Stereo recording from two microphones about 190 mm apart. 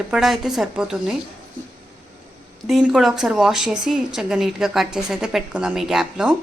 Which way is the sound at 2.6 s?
5° right (ahead or behind).